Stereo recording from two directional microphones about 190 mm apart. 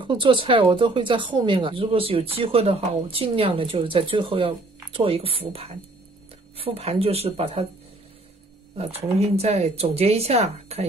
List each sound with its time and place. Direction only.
0.0 s speech: 25° right (ahead or behind)
8.7 s speech: 30° right (ahead or behind)